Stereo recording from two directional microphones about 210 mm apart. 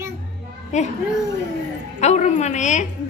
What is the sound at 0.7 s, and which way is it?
Speech, 35° left (ahead or behind).